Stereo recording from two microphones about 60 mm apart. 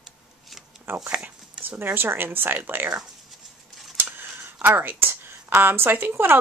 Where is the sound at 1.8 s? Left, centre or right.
Right.